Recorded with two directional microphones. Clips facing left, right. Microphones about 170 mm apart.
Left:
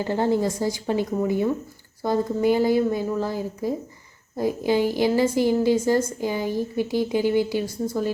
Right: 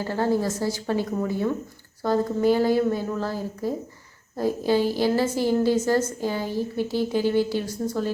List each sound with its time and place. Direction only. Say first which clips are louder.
0.0 s a woman's voice: left 2 dB; 20° left (ahead or behind)